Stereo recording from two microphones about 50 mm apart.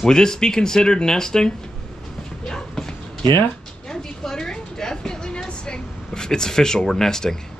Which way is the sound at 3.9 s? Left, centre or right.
Centre.